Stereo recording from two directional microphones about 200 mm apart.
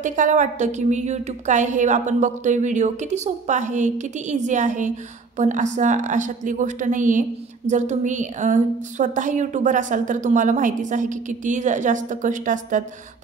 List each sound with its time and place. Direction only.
0.0 s a woman's voice: 40° right (ahead or behind)